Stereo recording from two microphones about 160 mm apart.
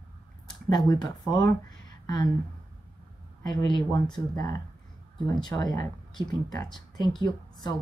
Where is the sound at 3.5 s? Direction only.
25° left (ahead or behind).